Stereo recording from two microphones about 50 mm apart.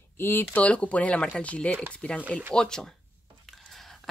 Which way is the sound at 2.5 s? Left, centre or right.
Centre.